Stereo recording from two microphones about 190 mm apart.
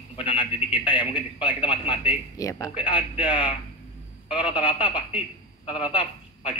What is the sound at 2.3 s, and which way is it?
A man's voice, 15° left (ahead or behind).